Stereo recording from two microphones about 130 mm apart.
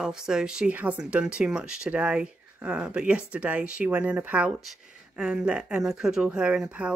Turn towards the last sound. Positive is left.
turn(degrees=-10)  # may be behind; listen again after turning